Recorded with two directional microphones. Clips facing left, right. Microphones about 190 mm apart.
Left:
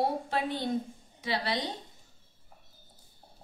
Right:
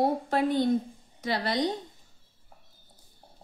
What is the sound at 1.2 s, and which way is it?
Speech, 45° right (ahead or behind).